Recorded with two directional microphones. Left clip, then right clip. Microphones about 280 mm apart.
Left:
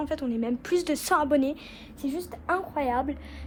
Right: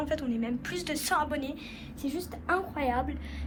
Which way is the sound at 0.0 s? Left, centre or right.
Centre.